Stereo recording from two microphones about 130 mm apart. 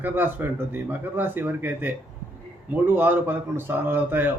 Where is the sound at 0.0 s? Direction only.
15° right (ahead or behind).